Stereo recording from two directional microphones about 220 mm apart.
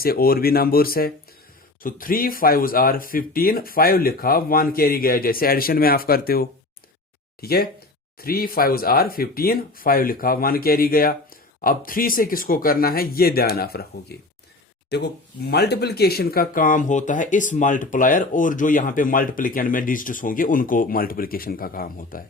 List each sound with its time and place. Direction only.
0.0 s speech: 40° left (ahead or behind)